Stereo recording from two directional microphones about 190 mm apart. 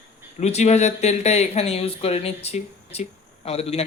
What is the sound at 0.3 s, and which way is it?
Speech, 35° left (ahead or behind).